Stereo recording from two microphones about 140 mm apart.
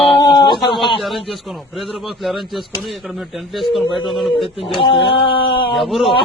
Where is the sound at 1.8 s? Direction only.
Centre (ahead or behind).